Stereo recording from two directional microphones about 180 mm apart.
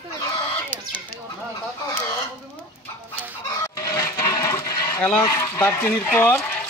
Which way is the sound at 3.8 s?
20° left (ahead or behind).